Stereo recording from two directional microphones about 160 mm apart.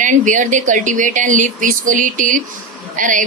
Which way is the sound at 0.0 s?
55° right (ahead or behind).